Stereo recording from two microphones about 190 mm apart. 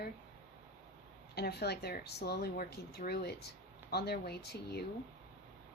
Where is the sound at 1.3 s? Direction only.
60° left (ahead or behind).